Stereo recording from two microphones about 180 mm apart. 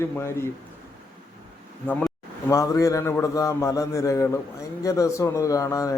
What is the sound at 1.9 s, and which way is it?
A man's voice, 10° left (ahead or behind).